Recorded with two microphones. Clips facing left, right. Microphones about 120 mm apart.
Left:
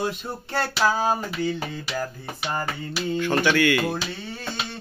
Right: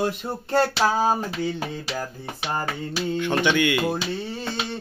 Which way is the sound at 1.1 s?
5° right (ahead or behind).